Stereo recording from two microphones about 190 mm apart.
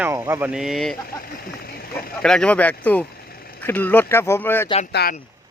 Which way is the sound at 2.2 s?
5° left (ahead or behind).